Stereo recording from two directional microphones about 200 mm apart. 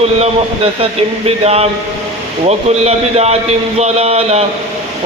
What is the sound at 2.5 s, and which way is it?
Speech, 30° right (ahead or behind).